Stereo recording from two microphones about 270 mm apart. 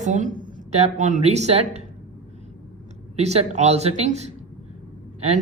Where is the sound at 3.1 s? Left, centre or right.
Right.